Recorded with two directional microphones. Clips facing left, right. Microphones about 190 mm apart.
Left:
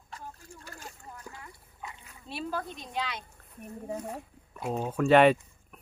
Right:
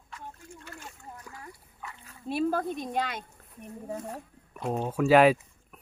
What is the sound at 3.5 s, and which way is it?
Speech, centre (ahead or behind).